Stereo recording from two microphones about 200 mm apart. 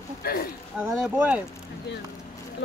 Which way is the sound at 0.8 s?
5° right (ahead or behind).